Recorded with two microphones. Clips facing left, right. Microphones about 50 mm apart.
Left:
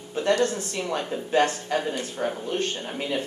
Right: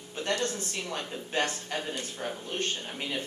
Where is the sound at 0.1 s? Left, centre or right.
Left.